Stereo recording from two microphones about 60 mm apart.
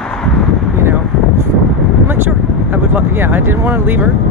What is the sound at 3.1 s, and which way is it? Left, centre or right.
Speech, right.